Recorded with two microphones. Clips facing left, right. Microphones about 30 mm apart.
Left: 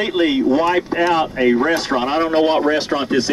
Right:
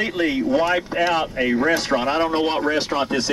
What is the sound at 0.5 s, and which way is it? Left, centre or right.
Speech, centre.